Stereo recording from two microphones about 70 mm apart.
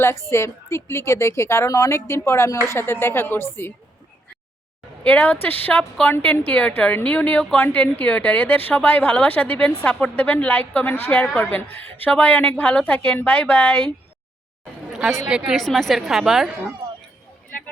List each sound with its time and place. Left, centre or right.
0.0 s a woman's voice: left
5.0 s a woman's voice: centre
14.9 s speech: centre
15.5 s a woman's voice: centre